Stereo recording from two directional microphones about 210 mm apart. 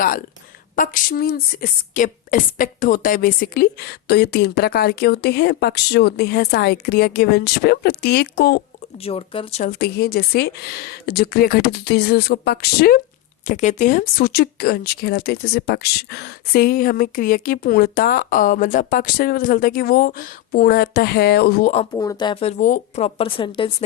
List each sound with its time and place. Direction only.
0.8 s speech: 45° left (ahead or behind)
9.0 s speech: 25° left (ahead or behind)
9.6 s speech: 50° left (ahead or behind)
13.5 s speech: 35° left (ahead or behind)
21.9 s speech: 20° left (ahead or behind)